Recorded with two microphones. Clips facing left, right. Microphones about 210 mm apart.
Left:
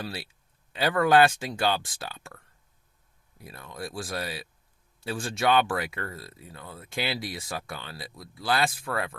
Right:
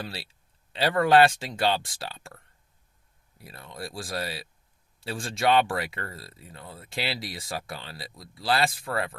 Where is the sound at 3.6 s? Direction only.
30° right (ahead or behind).